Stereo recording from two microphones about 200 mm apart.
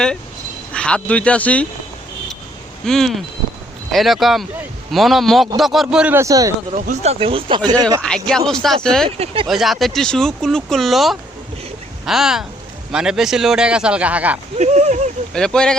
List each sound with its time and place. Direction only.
0.7 s speech: 5° left (ahead or behind)
2.8 s speech: centre (ahead or behind); by 6.5 s 15° right (ahead or behind)
6.8 s speech: 30° right (ahead or behind)
8.0 s speech: 5° left (ahead or behind)
9.0 s speech: 30° right (ahead or behind)
9.5 s speech: centre (ahead or behind)
14.6 s speech: 35° right (ahead or behind)
15.3 s speech: 5° left (ahead or behind)